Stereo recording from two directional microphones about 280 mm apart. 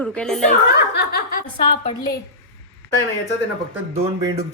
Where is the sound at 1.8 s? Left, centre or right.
Centre.